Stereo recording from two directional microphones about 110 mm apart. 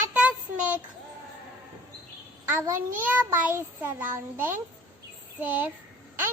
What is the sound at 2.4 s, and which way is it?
A child's voice, 20° right (ahead or behind).